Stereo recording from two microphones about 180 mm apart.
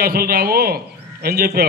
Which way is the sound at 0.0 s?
55° right (ahead or behind).